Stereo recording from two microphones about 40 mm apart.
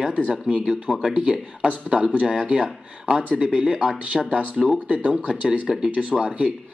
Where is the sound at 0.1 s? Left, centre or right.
Right.